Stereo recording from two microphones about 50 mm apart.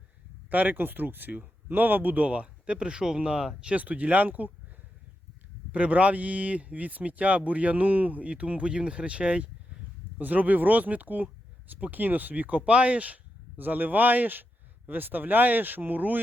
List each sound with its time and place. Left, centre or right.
0.5 s speech: right
5.7 s speech: right
10.2 s speech: right